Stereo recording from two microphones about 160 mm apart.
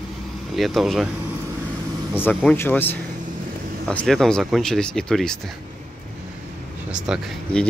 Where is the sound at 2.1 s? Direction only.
10° left (ahead or behind).